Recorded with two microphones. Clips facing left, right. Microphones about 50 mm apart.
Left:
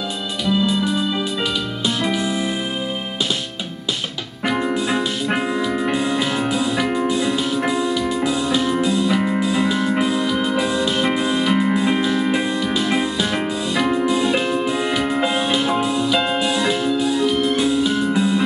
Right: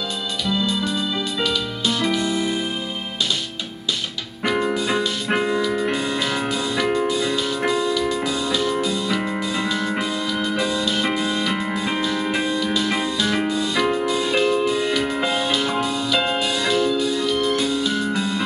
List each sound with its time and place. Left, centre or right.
0.5 s music: centre
4.5 s music: centre